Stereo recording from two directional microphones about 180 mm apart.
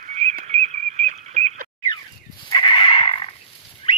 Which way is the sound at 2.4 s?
25° left (ahead or behind).